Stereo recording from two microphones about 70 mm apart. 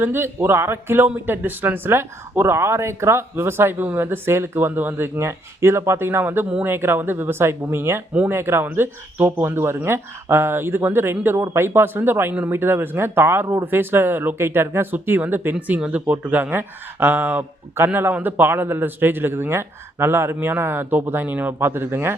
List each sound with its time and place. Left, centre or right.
0.0 s speech: right